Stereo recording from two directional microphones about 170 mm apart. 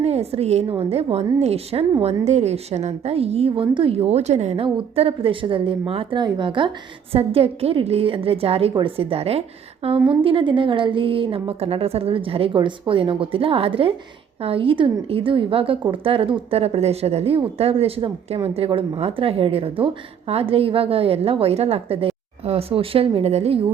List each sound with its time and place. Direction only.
0.0 s a woman's voice: 40° right (ahead or behind)